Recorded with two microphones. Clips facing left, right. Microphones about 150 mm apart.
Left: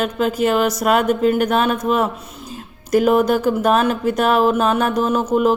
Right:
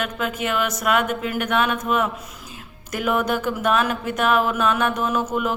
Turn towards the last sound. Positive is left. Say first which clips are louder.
# left 6 dB
turn(degrees=35)  # may be behind; listen again after turning